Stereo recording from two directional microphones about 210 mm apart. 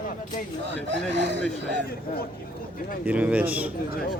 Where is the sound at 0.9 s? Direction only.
55° right (ahead or behind).